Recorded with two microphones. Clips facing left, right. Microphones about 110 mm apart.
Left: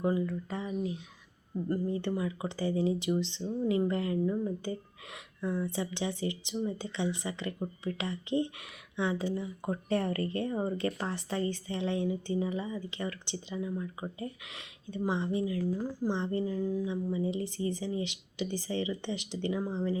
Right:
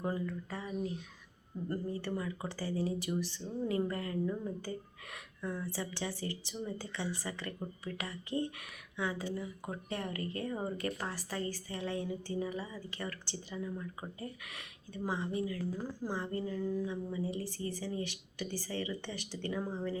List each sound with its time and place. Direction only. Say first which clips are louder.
0.5 s a woman's voice: left 5 dB; 20° left (ahead or behind)
1.7 s a woman's voice: left 5 dB; 20° left (ahead or behind)
10.5 s a woman's voice: left 5 dB; 25° left (ahead or behind)